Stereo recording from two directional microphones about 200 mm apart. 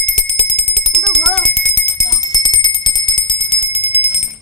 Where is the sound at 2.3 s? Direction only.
20° left (ahead or behind).